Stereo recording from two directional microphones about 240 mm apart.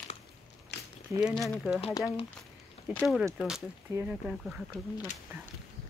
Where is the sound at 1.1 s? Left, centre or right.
Centre.